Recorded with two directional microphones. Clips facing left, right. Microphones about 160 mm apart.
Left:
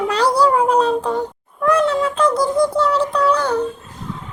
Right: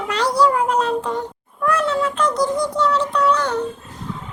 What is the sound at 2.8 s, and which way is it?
Synthetic singing, 30° left (ahead or behind).